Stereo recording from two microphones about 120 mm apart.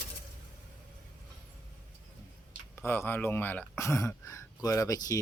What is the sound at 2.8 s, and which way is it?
Speech, 20° left (ahead or behind).